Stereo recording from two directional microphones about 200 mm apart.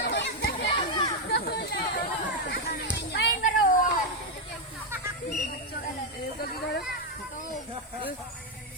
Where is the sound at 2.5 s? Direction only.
55° left (ahead or behind).